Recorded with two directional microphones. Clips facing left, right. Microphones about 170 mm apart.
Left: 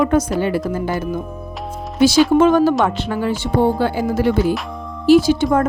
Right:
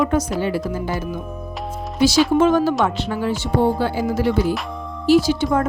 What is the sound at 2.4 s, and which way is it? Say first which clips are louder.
Speech: left 3 dB; 55° left (ahead or behind).